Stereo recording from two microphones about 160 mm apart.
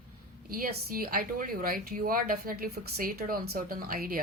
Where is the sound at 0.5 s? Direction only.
70° right (ahead or behind).